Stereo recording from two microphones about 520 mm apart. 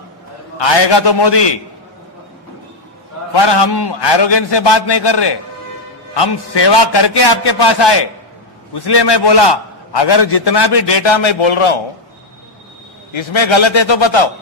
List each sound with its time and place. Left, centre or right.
0.6 s a man's voice: left
3.3 s a man's voice: left
13.1 s a man's voice: left